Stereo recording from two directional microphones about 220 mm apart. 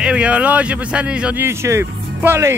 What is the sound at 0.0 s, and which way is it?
A man's voice, 5° right (ahead or behind).